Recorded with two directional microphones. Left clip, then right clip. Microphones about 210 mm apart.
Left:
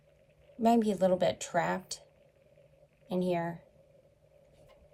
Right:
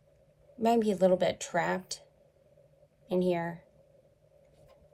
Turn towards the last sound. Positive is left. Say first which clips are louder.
# right 2 dB
turn(degrees=-25)  # may be behind; listen again after turning